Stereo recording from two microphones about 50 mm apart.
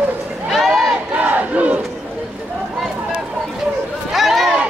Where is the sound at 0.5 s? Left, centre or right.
Centre.